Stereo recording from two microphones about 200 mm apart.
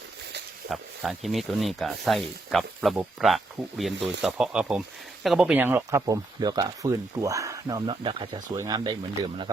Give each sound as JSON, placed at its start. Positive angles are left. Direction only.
{"t": 0.7, "sound": "speech", "side_deg": 0}